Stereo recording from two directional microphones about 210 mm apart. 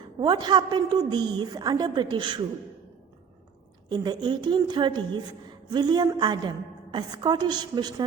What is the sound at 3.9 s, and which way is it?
A woman's voice, 20° right (ahead or behind).